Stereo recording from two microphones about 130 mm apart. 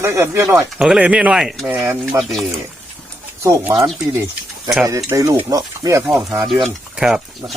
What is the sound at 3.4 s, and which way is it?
Speech, 20° right (ahead or behind).